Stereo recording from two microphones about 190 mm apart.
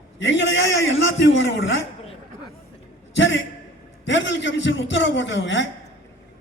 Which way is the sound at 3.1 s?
70° left (ahead or behind).